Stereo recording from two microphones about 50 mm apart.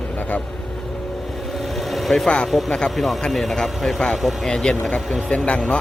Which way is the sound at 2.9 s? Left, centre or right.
Centre.